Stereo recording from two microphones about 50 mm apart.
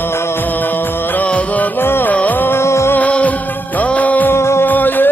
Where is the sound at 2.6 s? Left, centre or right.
Left.